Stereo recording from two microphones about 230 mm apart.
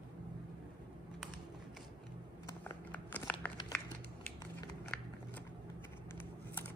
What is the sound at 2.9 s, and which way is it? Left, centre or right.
Crumpling, centre.